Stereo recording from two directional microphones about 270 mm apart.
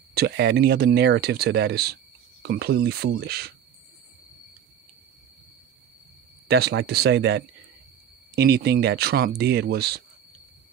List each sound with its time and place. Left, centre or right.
0.1 s speech: right
6.4 s speech: right